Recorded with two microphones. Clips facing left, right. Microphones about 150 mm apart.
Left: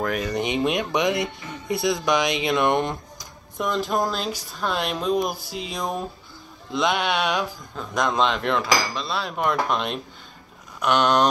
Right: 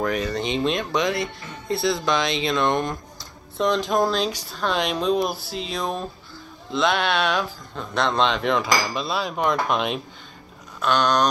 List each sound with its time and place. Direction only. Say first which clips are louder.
0.0 s cutlery: right 1 dB; 5° left (ahead or behind)
0.3 s speech: even; 15° left (ahead or behind)
7.7 s cutlery: right 1 dB; 10° left (ahead or behind)
10.8 s speech: left 1 dB; 20° left (ahead or behind)